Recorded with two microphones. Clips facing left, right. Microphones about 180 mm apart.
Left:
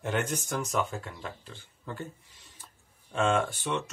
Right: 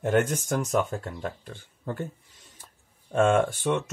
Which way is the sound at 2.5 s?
50° right (ahead or behind).